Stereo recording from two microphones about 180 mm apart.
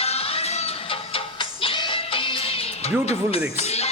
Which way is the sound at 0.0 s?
35° left (ahead or behind).